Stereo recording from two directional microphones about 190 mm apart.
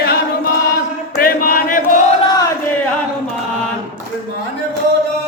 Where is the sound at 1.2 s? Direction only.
50° left (ahead or behind).